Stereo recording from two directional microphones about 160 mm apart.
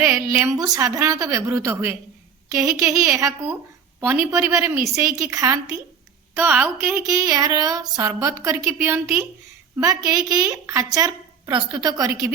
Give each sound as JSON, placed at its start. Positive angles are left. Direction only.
{"t": 0.0, "sound": "a woman's voice", "side_deg": -15}
{"t": 4.0, "sound": "a woman's voice", "side_deg": -10}